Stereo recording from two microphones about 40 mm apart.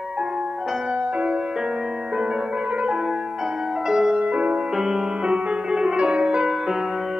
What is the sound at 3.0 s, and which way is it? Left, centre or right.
Music, centre.